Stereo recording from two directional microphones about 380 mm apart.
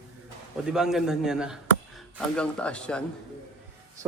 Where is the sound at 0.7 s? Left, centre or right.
Centre.